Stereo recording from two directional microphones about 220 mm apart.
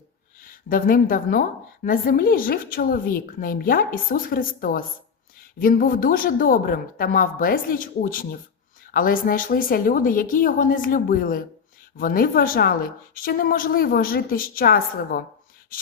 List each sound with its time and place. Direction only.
0.4 s a woman's voice: 40° left (ahead or behind)